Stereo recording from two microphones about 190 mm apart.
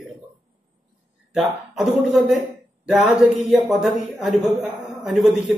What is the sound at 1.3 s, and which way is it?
A man's voice, 5° right (ahead or behind).